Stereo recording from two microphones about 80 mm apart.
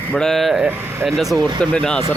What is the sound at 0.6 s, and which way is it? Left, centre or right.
Speech, right.